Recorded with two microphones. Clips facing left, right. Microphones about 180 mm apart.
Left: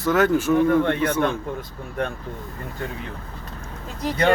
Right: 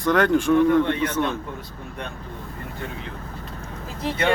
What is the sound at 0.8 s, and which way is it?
Speech, 50° left (ahead or behind).